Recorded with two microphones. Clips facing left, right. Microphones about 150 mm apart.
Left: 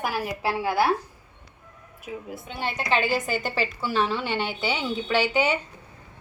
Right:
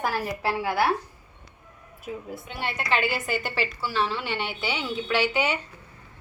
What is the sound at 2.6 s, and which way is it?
A woman's voice, 30° left (ahead or behind).